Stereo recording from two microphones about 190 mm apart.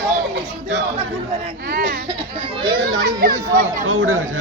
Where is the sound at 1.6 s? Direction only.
55° right (ahead or behind).